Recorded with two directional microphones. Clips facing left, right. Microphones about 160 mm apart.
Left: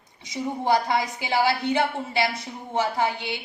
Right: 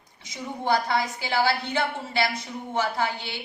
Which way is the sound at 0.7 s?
15° left (ahead or behind).